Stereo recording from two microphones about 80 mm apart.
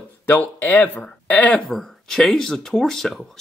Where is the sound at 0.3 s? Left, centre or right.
Left.